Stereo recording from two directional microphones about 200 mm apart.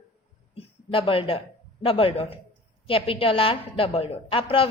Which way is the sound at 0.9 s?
25° left (ahead or behind).